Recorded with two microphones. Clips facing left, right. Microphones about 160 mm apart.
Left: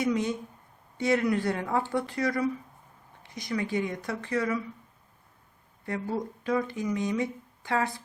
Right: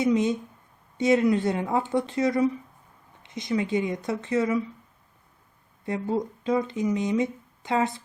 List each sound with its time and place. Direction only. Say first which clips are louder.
0.0 s speech: right 5 dB; 20° right (ahead or behind)
5.8 s speech: right 4 dB; 20° right (ahead or behind)